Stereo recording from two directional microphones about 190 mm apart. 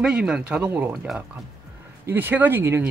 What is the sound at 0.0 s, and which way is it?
Speech, 5° right (ahead or behind).